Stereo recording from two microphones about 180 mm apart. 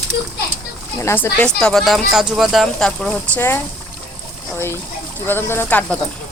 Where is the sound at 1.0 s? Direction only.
15° left (ahead or behind).